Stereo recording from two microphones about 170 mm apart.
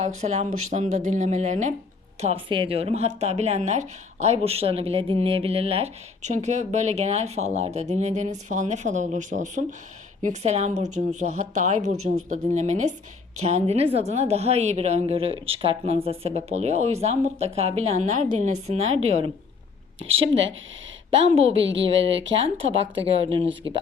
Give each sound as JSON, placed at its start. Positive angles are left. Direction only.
{"t": 0.0, "sound": "speech", "side_deg": -45}
{"t": 2.2, "sound": "speech", "side_deg": -30}
{"t": 21.2, "sound": "speech", "side_deg": -35}
{"t": 21.6, "sound": "speech", "side_deg": -90}